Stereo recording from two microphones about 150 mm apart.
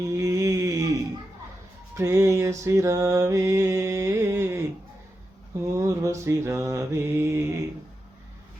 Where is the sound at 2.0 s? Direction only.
20° right (ahead or behind).